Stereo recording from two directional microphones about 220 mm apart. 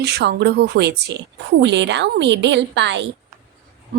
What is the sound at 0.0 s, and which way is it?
A woman's voice, 50° right (ahead or behind).